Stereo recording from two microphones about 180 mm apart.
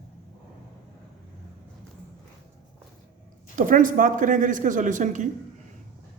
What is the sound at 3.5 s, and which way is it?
Speech, 45° right (ahead or behind).